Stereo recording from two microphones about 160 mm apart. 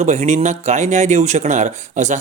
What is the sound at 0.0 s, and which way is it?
Speech, 45° right (ahead or behind).